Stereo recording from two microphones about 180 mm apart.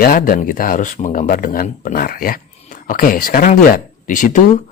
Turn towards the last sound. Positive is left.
turn(degrees=45)  # may be behind; listen again after turning